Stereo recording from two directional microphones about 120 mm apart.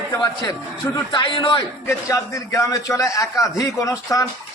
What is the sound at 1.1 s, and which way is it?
Speech, 45° left (ahead or behind).